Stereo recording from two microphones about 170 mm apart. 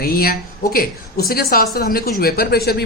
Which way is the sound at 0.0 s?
60° left (ahead or behind).